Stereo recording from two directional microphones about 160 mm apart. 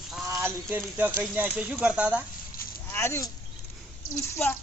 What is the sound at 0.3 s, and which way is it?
Speech, 10° right (ahead or behind).